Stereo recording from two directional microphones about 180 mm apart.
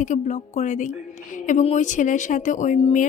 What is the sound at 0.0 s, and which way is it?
A woman's voice, 40° left (ahead or behind).